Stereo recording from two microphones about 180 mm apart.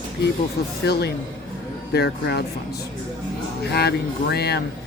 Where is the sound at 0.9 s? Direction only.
65° left (ahead or behind).